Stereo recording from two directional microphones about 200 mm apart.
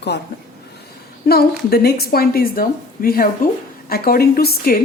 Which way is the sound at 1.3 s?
50° left (ahead or behind).